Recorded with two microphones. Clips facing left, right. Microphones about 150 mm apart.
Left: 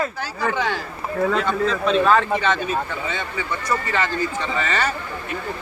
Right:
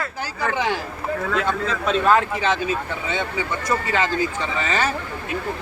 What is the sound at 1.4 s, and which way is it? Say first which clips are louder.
Speech: left 2 dB; 5° right (ahead or behind).